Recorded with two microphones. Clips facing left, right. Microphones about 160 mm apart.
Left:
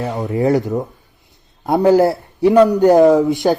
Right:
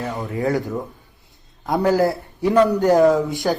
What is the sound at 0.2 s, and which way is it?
Speech, 20° left (ahead or behind).